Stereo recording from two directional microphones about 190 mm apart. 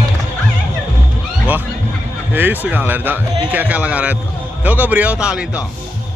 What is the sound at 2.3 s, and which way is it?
Speech, 10° right (ahead or behind).